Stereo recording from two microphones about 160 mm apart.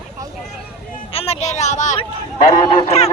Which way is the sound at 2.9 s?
40° left (ahead or behind).